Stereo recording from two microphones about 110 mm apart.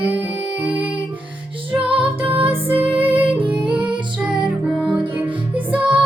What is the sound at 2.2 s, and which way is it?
Music, 55° right (ahead or behind).